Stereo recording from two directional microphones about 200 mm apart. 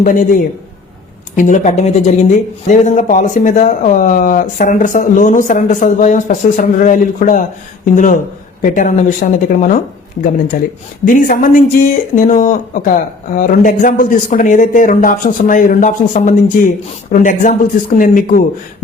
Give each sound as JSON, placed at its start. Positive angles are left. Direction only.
{"t": 0.0, "sound": "speech", "side_deg": 40}
{"t": 11.0, "sound": "speech", "side_deg": 40}